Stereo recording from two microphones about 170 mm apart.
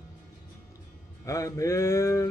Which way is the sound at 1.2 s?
15° left (ahead or behind).